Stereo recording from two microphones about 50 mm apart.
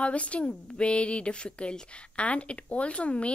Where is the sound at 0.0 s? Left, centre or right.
Left.